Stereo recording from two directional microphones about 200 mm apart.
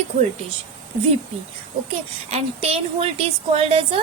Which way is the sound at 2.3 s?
30° right (ahead or behind).